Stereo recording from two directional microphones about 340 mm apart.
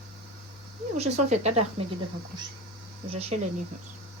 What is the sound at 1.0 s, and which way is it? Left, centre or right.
Speech, centre.